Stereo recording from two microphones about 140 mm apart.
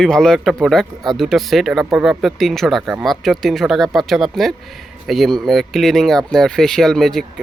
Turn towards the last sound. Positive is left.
turn(degrees=0)  # may be behind; listen again after turning